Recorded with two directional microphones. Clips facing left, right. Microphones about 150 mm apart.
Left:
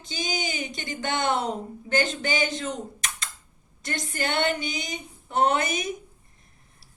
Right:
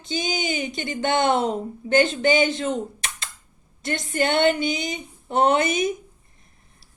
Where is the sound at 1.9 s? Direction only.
25° right (ahead or behind).